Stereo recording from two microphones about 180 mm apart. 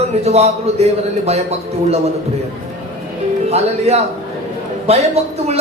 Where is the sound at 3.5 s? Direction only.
35° right (ahead or behind).